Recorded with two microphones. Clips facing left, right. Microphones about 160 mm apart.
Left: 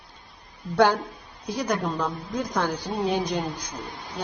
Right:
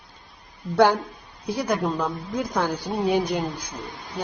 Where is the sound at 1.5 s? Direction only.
10° right (ahead or behind).